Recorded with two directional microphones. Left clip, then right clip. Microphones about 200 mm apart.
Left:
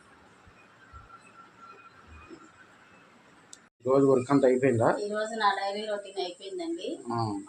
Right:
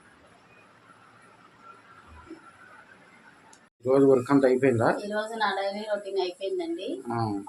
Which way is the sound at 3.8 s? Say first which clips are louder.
Right 2 dB; 5° right (ahead or behind).